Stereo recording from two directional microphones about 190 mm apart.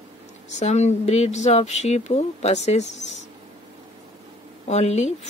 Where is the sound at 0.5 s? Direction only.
35° left (ahead or behind).